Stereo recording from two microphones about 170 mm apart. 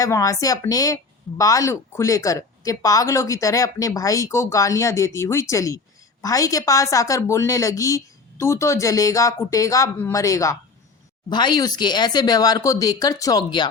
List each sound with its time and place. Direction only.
0.0 s speech: 20° left (ahead or behind)